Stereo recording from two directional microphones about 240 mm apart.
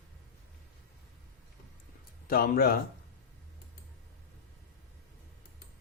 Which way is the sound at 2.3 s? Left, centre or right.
Left.